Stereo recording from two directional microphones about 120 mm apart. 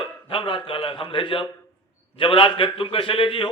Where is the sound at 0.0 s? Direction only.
45° left (ahead or behind).